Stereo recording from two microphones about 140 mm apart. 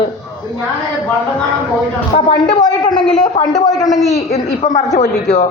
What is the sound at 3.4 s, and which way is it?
A woman's voice, 45° left (ahead or behind).